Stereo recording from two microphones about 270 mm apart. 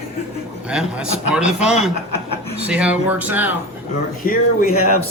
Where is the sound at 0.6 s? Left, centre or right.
Centre.